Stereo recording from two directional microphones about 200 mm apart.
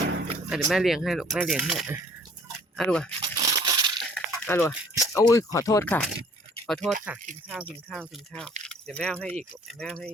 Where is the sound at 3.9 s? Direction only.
5° left (ahead or behind).